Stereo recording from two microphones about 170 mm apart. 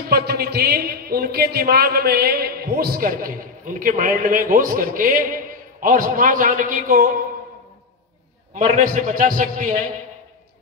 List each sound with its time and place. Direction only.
0.1 s a man's voice: 65° right (ahead or behind)
8.5 s a man's voice: 50° right (ahead or behind)